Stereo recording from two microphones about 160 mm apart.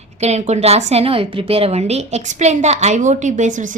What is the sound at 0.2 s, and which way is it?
A woman's voice, 45° right (ahead or behind).